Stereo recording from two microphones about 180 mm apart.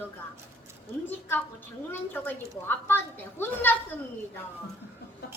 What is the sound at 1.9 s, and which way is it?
A woman's voice, 10° left (ahead or behind).